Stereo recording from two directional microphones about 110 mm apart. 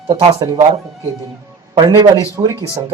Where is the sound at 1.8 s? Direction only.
40° right (ahead or behind).